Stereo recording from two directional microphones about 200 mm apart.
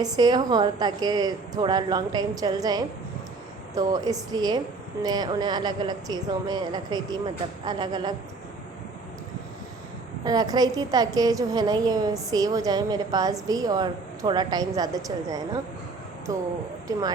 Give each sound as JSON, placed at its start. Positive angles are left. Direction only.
{"t": 0.0, "sound": "a woman's voice", "side_deg": -20}
{"t": 10.2, "sound": "a woman's voice", "side_deg": -20}